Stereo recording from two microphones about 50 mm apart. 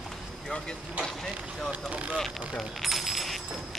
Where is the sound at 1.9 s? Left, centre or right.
Right.